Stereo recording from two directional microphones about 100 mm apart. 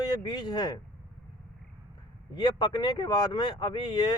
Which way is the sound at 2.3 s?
50° left (ahead or behind).